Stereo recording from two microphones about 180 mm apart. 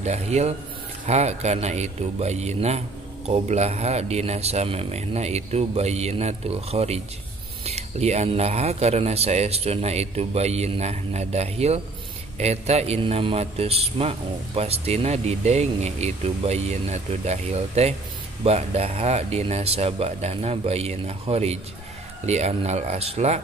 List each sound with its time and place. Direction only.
0.0 s a man's voice: 40° right (ahead or behind)